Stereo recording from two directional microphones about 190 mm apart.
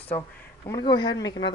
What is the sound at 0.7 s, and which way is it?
Speech, 25° left (ahead or behind).